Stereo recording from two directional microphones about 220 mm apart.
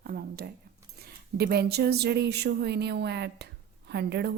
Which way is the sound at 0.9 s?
45° right (ahead or behind).